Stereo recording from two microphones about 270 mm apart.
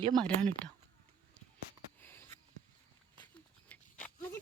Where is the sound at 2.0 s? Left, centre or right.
Centre.